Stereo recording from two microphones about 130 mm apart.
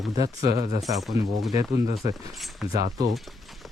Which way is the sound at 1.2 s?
45° left (ahead or behind).